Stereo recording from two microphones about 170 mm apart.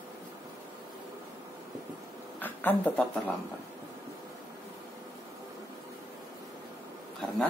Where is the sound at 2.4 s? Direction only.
10° left (ahead or behind).